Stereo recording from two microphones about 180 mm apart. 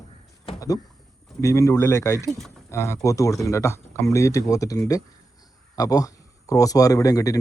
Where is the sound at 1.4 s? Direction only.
15° left (ahead or behind).